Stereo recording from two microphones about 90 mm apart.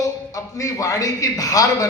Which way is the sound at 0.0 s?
35° left (ahead or behind).